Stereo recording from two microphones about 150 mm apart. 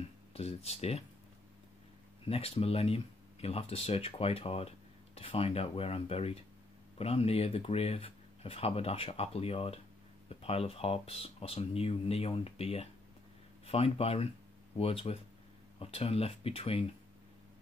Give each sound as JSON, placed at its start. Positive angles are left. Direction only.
{"t": 0.3, "sound": "speech", "side_deg": 40}
{"t": 2.2, "sound": "speech", "side_deg": 40}